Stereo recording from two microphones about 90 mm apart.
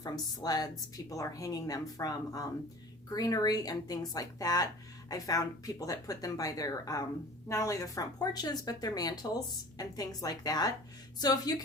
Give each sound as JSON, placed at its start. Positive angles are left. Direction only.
{"t": 0.0, "sound": "speech", "side_deg": 45}